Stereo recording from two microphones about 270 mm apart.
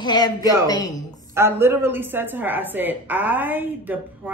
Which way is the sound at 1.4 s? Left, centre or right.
Centre.